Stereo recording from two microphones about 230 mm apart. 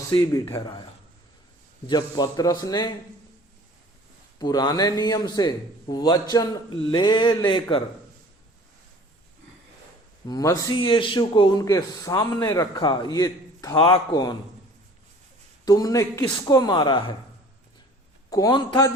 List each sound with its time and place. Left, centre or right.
0.1 s a man's voice: centre
1.9 s a man's voice: centre
4.4 s a man's voice: centre
10.2 s a man's voice: centre
15.6 s a man's voice: centre
18.3 s a man's voice: centre